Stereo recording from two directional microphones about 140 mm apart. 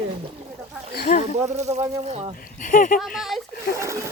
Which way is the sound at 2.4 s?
80° left.